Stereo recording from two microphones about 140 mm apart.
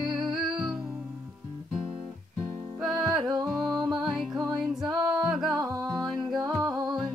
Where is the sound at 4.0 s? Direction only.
5° right (ahead or behind).